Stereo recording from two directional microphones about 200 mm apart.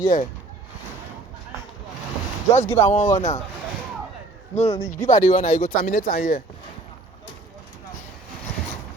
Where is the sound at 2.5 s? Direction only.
35° left (ahead or behind).